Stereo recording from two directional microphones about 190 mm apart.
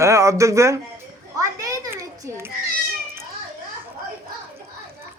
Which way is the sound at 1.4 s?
20° right (ahead or behind).